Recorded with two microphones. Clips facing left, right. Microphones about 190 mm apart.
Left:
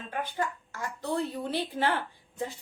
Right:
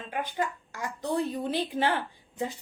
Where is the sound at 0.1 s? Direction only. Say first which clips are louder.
Right 1 dB; 15° right (ahead or behind).